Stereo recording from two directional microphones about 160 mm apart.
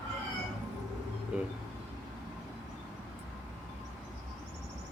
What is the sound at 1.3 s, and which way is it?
Speech, 10° right (ahead or behind).